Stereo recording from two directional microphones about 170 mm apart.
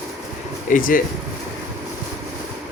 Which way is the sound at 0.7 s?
50° left (ahead or behind).